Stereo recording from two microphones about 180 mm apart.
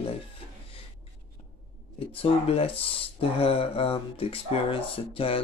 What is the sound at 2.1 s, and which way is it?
Speech, 30° left (ahead or behind).